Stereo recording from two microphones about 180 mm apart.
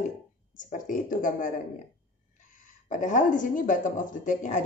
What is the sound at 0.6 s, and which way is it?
Speech, 45° left (ahead or behind).